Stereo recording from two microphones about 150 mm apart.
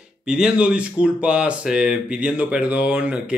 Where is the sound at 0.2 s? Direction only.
5° right (ahead or behind).